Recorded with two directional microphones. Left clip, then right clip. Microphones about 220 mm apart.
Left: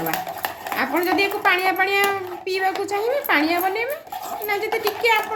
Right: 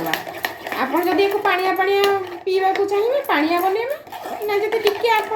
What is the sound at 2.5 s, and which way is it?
Speech, 25° left (ahead or behind).